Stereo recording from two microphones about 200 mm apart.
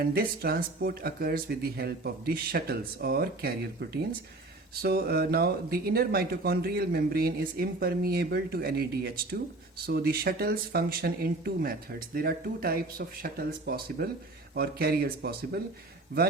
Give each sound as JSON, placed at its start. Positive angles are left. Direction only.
{"t": 0.0, "sound": "speech", "side_deg": -50}